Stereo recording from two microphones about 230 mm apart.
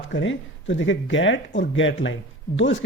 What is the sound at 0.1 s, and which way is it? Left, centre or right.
Speech, left.